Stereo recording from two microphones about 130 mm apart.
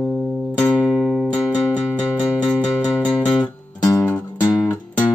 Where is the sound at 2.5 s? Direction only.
5° left (ahead or behind).